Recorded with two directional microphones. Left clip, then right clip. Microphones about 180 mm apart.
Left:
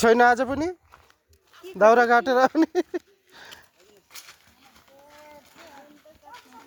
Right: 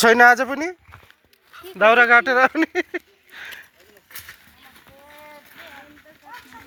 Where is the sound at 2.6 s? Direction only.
35° left (ahead or behind).